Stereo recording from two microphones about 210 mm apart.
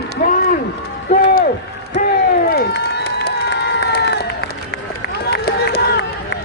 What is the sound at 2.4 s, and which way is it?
Crowd, 45° left (ahead or behind).